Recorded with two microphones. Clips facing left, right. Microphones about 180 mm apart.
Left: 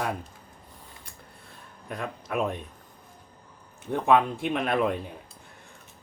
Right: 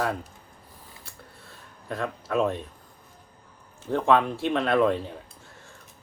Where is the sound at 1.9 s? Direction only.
15° left (ahead or behind).